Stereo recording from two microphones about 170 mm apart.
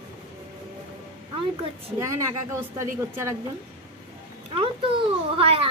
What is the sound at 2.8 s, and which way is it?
Speech, 15° right (ahead or behind).